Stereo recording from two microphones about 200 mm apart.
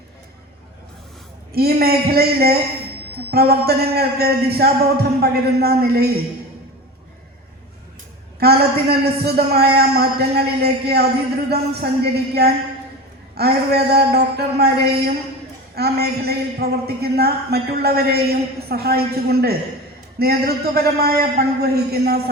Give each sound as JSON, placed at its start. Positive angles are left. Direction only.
{"t": 1.5, "sound": "a man's voice", "side_deg": -50}
{"t": 8.4, "sound": "a man's voice", "side_deg": -50}